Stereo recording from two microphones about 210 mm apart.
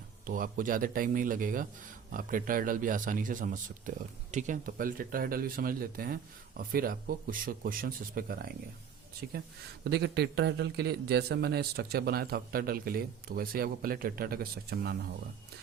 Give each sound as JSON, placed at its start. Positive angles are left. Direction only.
{"t": 0.3, "sound": "a man's voice", "side_deg": -40}
{"t": 9.8, "sound": "a man's voice", "side_deg": -55}